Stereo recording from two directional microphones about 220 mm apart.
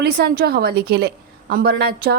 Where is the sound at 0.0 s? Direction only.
45° right (ahead or behind).